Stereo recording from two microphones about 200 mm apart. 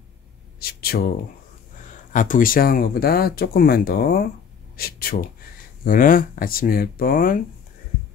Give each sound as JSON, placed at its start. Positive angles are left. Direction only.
{"t": 0.6, "sound": "speech", "side_deg": 50}
{"t": 2.1, "sound": "speech", "side_deg": 40}